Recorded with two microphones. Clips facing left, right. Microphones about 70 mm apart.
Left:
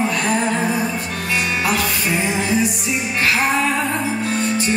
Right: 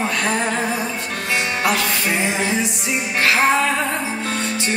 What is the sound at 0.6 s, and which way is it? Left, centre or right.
Music, left.